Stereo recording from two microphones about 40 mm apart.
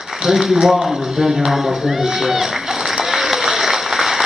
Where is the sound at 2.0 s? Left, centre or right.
Centre.